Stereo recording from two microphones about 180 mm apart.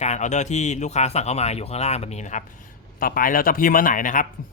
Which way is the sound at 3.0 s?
50° left (ahead or behind).